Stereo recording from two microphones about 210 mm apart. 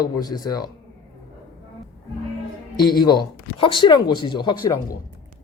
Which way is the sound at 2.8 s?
20° left (ahead or behind).